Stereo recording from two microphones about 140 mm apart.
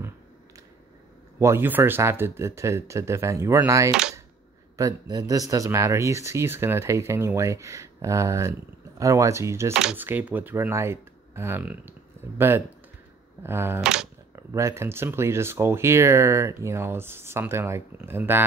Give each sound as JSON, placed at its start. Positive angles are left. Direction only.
{"t": 1.4, "sound": "speech", "side_deg": -15}
{"t": 9.8, "sound": "speech", "side_deg": -5}
{"t": 13.7, "sound": "speech", "side_deg": -5}
{"t": 14.3, "sound": "speech", "side_deg": -20}